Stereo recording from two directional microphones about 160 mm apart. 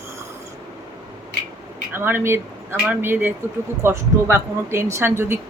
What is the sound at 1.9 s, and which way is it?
Speech, 15° right (ahead or behind).